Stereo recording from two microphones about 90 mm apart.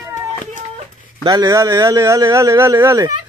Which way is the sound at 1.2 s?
40° right (ahead or behind).